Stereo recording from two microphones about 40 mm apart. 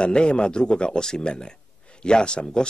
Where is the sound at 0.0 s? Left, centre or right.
Left.